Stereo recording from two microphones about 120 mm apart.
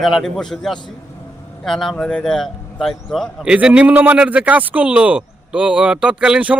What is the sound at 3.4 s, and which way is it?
Speech, 10° right (ahead or behind).